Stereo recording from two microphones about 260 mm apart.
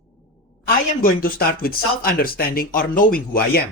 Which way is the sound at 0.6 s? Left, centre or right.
Left.